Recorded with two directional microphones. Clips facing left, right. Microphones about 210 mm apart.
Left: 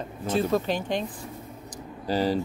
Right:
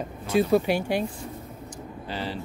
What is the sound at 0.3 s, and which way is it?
Speech, 10° right (ahead or behind).